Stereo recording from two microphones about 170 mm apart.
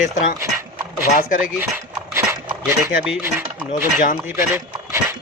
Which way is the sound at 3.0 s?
10° right (ahead or behind).